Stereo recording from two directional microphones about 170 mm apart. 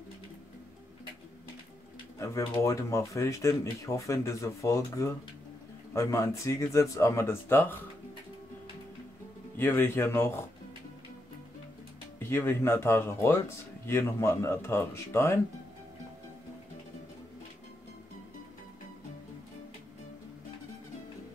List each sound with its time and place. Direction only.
2.1 s speech: 15° left (ahead or behind)
9.6 s speech: 10° left (ahead or behind)
12.2 s speech: 15° left (ahead or behind)